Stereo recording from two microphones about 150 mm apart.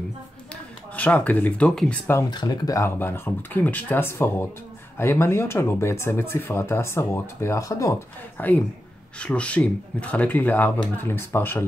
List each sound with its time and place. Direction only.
0.9 s speech: 10° left (ahead or behind)
2.3 s speech: 25° left (ahead or behind)